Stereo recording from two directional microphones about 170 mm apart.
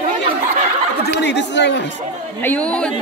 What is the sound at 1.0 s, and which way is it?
Chatter, 90° left.